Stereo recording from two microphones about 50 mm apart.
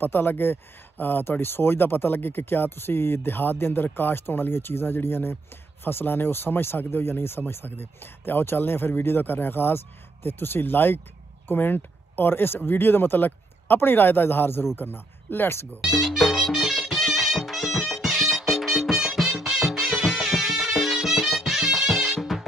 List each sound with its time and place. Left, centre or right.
0.0 s speech: left
15.8 s music: centre